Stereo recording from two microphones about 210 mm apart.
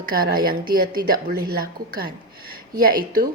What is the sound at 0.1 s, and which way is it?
A woman's voice, 45° right (ahead or behind).